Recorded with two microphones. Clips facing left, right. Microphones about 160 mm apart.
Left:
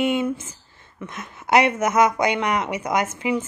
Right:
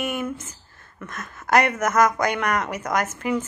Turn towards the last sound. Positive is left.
turn(degrees=10)  # may be behind; listen again after turning